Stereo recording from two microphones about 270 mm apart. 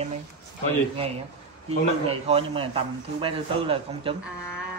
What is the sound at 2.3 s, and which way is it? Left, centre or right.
A man's voice, centre.